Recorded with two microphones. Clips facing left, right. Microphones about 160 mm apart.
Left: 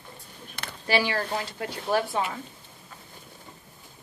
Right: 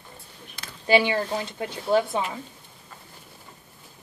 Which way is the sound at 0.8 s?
20° right (ahead or behind).